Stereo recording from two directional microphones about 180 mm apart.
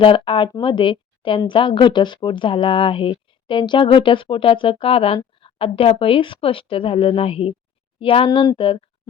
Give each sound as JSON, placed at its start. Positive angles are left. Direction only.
{"t": 0.0, "sound": "speech", "side_deg": 30}